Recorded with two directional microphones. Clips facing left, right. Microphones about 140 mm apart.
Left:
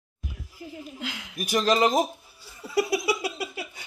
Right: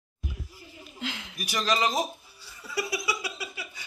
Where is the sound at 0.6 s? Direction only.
70° left (ahead or behind).